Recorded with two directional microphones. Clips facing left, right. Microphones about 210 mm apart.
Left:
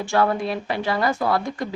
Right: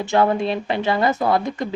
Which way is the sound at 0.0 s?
20° right (ahead or behind).